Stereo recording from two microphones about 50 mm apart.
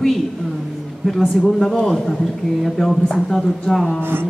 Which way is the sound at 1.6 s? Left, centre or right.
Centre.